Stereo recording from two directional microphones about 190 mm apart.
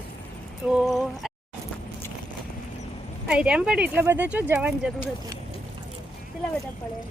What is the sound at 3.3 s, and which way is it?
Speech, 5° right (ahead or behind).